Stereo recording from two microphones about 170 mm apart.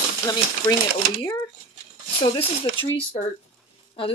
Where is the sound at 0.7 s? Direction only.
20° left (ahead or behind).